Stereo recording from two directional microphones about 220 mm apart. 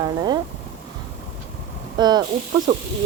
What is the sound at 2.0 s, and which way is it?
Speech, 20° right (ahead or behind).